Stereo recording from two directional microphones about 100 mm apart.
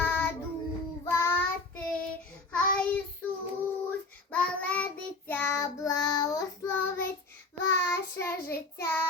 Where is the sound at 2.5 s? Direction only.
10° left (ahead or behind).